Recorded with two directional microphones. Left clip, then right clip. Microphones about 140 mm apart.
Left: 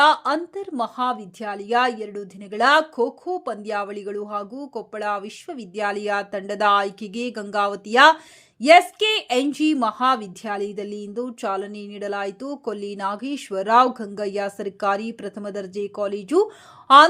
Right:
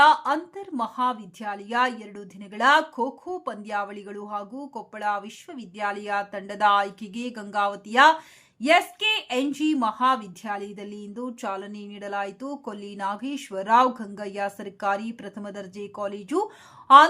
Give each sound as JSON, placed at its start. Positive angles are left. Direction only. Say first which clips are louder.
{"t": 0.0, "sound": "a woman's voice", "louder": "left 1 dB", "side_deg": 30}